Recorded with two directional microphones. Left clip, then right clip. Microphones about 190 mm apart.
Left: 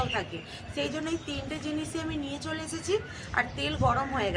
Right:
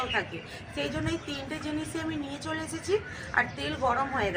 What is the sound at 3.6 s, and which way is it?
Speech, 15° left (ahead or behind).